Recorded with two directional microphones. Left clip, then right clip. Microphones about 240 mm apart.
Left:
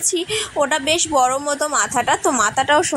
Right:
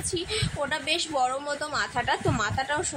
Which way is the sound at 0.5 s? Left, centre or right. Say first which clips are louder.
Left 11 dB; centre.